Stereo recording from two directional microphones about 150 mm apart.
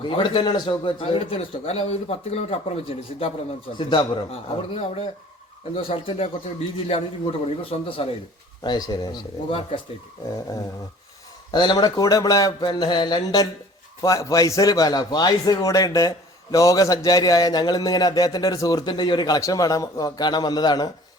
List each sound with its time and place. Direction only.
0.0 s a man's voice: 35° left (ahead or behind)
11.5 s a man's voice: 30° left (ahead or behind)